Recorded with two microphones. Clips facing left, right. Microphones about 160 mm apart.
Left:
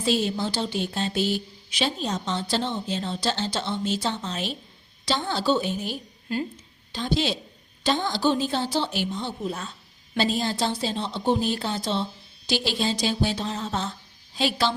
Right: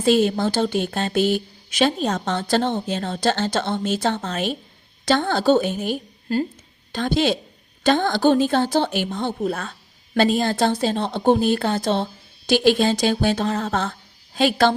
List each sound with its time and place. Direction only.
0.0 s a woman's voice: 55° right (ahead or behind)